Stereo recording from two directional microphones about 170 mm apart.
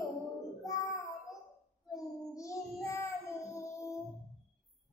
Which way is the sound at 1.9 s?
20° left (ahead or behind).